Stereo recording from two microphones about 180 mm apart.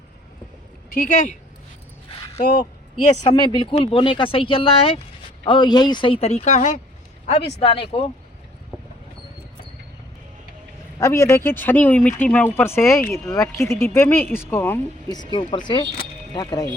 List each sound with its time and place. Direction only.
0.9 s speech: 45° left (ahead or behind)
3.3 s speech: 25° left (ahead or behind)
11.0 s speech: 15° left (ahead or behind)
15.1 s speech: 25° left (ahead or behind)